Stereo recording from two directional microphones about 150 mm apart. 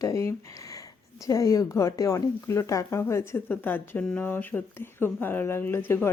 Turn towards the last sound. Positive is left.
turn(degrees=15)  # may be behind; listen again after turning